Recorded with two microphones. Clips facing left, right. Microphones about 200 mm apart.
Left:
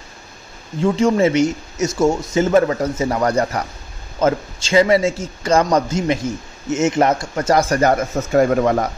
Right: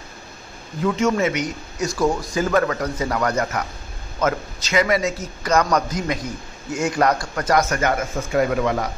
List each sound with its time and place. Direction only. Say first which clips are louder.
0.7 s a man's voice: left 4 dB; 30° left (ahead or behind)